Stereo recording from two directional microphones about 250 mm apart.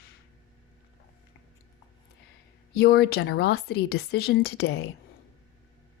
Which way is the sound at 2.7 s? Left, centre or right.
Left.